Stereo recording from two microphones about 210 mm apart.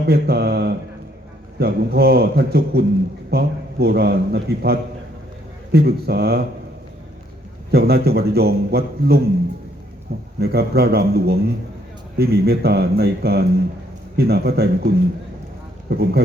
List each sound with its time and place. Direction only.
0.0 s a man's voice: 50° right (ahead or behind)
7.7 s a man's voice: 50° right (ahead or behind)